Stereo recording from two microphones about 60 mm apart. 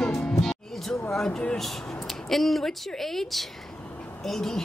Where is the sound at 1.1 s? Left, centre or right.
Centre.